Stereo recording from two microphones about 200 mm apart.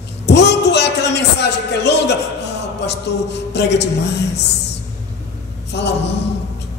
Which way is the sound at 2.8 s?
60° left (ahead or behind).